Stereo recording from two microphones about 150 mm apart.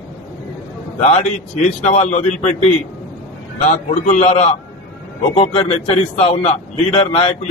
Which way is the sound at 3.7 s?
55° left (ahead or behind).